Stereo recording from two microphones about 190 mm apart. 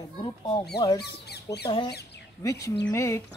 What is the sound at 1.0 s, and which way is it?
Squawk, 60° left (ahead or behind).